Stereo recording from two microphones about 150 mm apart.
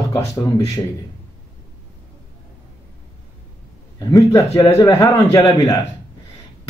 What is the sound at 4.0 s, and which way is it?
A man's voice, 20° left (ahead or behind).